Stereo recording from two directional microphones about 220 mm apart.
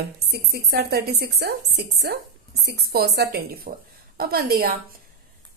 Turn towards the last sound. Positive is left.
turn(degrees=-45)  # may be behind; listen again after turning